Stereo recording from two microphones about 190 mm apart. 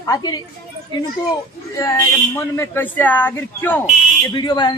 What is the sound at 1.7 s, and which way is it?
Speech, 15° left (ahead or behind).